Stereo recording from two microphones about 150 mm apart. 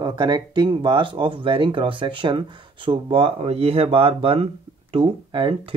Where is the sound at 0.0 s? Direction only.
30° right (ahead or behind).